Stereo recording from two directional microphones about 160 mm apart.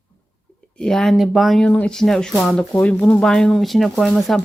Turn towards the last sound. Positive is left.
turn(degrees=0)  # may be behind; listen again after turning